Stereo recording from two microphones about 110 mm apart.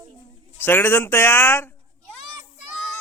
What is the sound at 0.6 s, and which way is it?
A man's voice, 20° left (ahead or behind).